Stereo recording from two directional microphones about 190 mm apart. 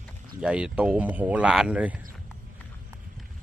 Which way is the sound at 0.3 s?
5° right (ahead or behind).